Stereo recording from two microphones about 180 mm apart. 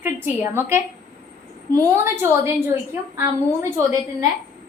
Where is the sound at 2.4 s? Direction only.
15° right (ahead or behind).